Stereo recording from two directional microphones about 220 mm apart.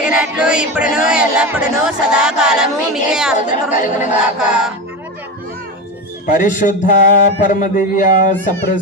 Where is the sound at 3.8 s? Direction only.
35° left (ahead or behind).